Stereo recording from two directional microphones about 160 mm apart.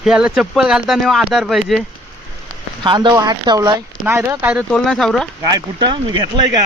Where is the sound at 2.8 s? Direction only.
30° right (ahead or behind).